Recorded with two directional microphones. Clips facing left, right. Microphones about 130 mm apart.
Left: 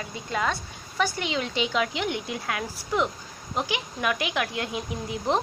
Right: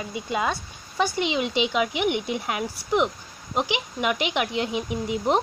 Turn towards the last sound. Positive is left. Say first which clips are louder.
# right 3 dB
turn(degrees=-20)  # may be behind; listen again after turning